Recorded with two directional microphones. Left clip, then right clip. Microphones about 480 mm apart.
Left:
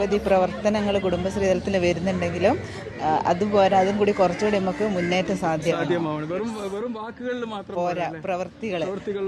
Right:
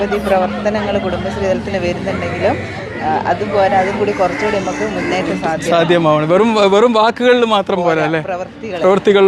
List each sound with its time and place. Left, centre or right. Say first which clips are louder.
0.0 s speech: right 6 dB; left
3.2 s speech: right 5 dB; left
5.7 s speech: right 14 dB; centre